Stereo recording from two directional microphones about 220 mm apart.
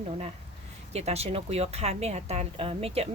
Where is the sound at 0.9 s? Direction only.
30° right (ahead or behind).